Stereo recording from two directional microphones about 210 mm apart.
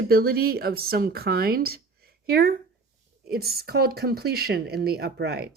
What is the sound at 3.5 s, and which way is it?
Speech, 50° right (ahead or behind).